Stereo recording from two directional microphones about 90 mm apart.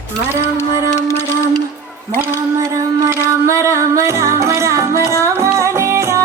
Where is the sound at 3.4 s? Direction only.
30° right (ahead or behind).